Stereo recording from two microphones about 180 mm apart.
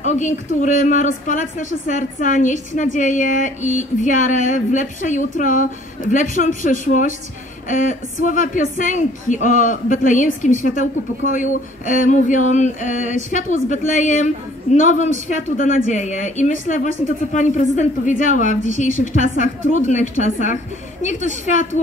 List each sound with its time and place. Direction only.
0.0 s a woman's voice: 40° left (ahead or behind)